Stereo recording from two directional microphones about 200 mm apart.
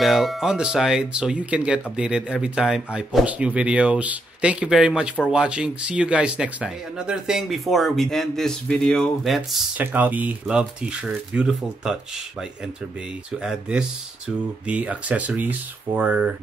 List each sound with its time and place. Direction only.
0.0 s speech: centre (ahead or behind)